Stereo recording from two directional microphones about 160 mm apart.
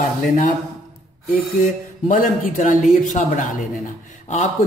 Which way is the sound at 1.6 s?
55° left (ahead or behind).